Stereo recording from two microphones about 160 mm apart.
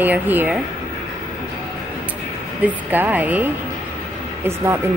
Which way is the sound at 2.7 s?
10° right (ahead or behind).